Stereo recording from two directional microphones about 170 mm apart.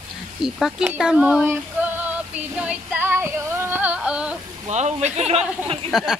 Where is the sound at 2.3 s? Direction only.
5° right (ahead or behind).